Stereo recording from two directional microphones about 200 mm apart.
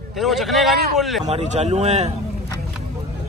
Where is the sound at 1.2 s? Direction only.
35° right (ahead or behind).